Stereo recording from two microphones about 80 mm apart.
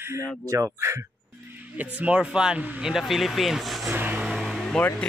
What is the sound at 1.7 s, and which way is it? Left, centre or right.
Speech, centre.